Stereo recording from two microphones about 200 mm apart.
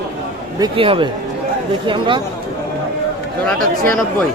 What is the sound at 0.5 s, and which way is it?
A man's voice, 25° right (ahead or behind).